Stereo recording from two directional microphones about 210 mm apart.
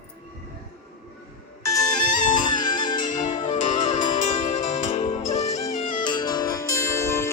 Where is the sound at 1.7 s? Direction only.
15° left (ahead or behind).